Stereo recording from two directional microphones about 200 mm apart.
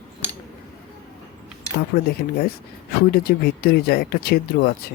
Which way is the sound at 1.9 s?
45° left (ahead or behind).